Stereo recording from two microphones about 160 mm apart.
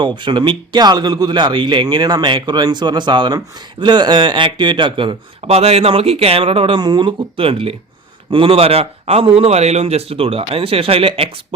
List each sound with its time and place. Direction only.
0.0 s a man's voice: 30° right (ahead or behind)